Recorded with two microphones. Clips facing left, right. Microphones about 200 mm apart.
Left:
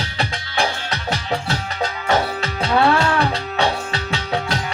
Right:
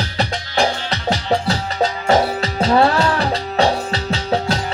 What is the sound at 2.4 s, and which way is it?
Music, 35° right (ahead or behind).